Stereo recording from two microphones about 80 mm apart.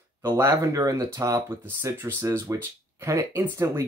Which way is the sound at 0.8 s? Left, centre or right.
Right.